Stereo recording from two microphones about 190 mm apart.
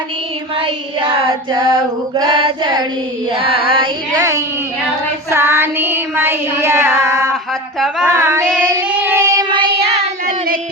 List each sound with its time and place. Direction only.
0.6 s female singing: 25° right (ahead or behind)
4.2 s child singing: 15° right (ahead or behind); by 10.3 s 30° right (ahead or behind)